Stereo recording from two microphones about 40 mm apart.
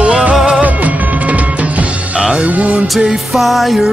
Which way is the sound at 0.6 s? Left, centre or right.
Right.